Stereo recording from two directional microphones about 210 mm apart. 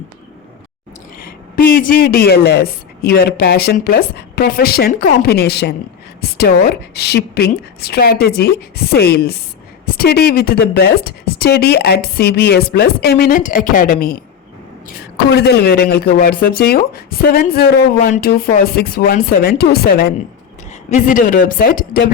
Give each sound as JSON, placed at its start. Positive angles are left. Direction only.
{"t": 1.2, "sound": "speech", "side_deg": 45}